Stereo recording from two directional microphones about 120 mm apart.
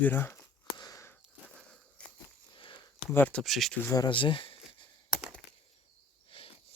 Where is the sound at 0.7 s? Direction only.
35° left (ahead or behind).